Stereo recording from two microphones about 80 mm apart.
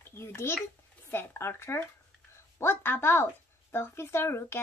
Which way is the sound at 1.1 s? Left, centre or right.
Left.